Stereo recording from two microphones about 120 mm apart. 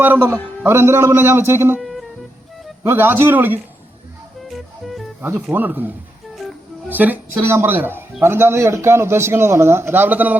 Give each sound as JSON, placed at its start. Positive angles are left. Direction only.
{"t": 0.0, "sound": "a man's voice", "side_deg": -20}
{"t": 1.8, "sound": "music", "side_deg": 0}
{"t": 2.8, "sound": "speech", "side_deg": -20}
{"t": 4.4, "sound": "music", "side_deg": 0}
{"t": 5.2, "sound": "a man's voice", "side_deg": -15}